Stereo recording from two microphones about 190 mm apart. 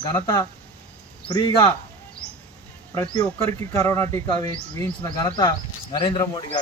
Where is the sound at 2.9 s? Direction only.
15° left (ahead or behind).